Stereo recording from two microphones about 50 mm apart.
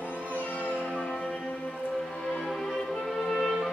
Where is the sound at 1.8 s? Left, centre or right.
Centre.